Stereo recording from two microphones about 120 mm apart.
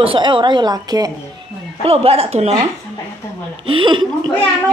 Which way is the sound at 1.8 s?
55° right (ahead or behind).